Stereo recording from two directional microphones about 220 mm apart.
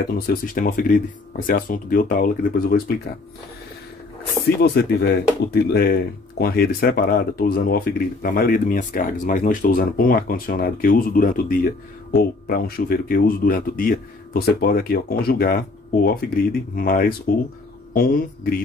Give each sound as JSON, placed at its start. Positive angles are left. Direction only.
{"t": 0.0, "sound": "speech", "side_deg": 40}
{"t": 4.6, "sound": "speech", "side_deg": 45}